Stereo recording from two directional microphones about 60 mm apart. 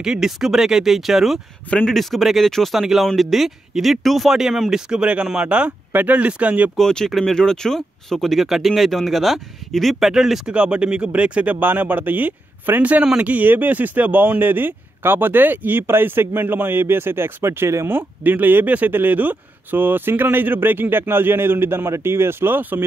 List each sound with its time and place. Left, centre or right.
0.0 s speech: centre
6.8 s speech: centre
11.6 s speech: right
17.8 s speech: right